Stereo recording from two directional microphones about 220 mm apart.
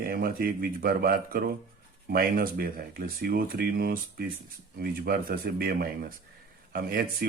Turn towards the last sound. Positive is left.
turn(degrees=-40)  # may be behind; listen again after turning